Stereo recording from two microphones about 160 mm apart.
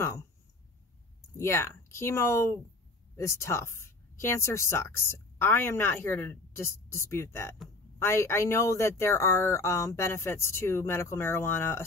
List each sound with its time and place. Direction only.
1.3 s speech: 15° left (ahead or behind)